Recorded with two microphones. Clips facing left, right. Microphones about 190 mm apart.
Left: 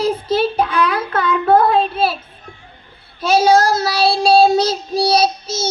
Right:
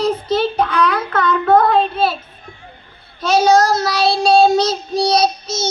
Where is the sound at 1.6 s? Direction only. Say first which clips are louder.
Even; 5° left (ahead or behind).